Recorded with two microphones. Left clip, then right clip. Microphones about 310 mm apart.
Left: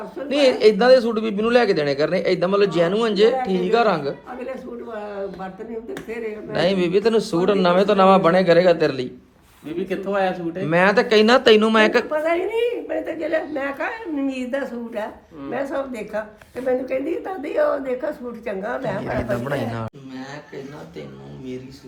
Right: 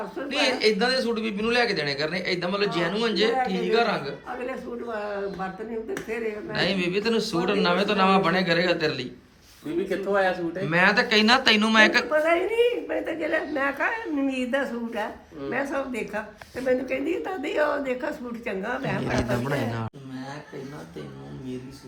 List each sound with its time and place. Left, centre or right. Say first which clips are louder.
0.2 s a man's voice: left 7 dB; centre
9.9 s speech: left 2 dB; left
10.6 s a man's voice: left 4 dB; centre